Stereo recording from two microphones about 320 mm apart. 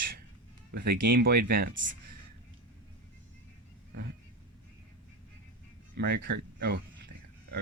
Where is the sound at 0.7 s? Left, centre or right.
Right.